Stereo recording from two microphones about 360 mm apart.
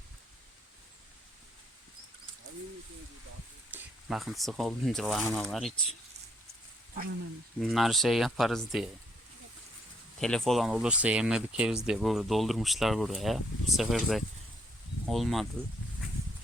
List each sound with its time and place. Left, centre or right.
3.7 s speech: centre
7.6 s speech: centre
10.2 s speech: centre